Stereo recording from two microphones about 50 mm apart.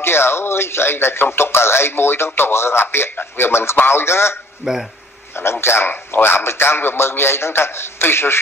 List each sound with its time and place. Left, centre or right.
0.0 s a man's voice: left
4.6 s speech: centre
5.3 s a man's voice: left